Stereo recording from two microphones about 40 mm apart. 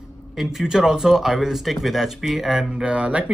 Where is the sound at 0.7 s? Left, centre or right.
Centre.